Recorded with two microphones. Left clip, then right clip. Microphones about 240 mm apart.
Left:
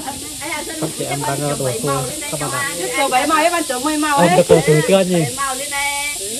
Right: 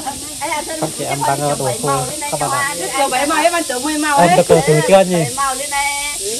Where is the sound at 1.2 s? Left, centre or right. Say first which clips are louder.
Right 5 dB; centre.